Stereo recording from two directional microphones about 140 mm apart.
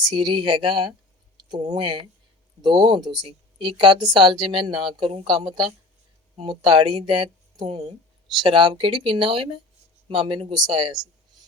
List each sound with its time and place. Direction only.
0.0 s speech: 35° right (ahead or behind)
6.6 s speech: 35° right (ahead or behind)